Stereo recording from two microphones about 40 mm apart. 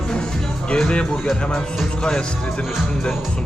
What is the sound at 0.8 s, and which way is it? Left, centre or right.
Speech, left.